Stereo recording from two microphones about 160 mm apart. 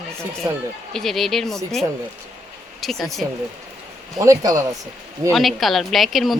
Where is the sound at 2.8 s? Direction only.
Centre (ahead or behind).